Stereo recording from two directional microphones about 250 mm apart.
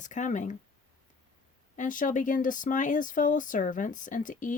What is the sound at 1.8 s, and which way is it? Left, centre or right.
Speech, left.